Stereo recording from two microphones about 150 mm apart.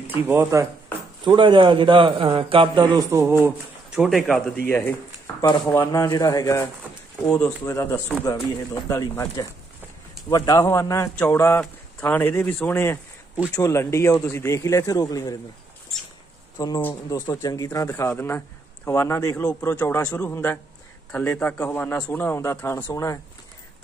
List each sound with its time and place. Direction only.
0.1 s speech: 15° right (ahead or behind)
1.2 s a man's voice: 35° right (ahead or behind)
3.1 s speech: 15° right (ahead or behind)
3.9 s speech: centre (ahead or behind)
4.6 s speech: 15° left (ahead or behind)
5.4 s speech: 25° left (ahead or behind)
7.2 s a man's voice: 5° left (ahead or behind)
7.6 s a man's voice: 20° left (ahead or behind)
16.5 s a man's voice: 25° left (ahead or behind)